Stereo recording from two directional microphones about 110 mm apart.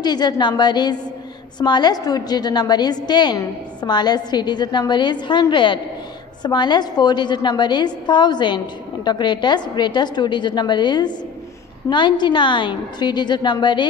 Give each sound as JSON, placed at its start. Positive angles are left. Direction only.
{"t": 0.0, "sound": "a woman's voice", "side_deg": 40}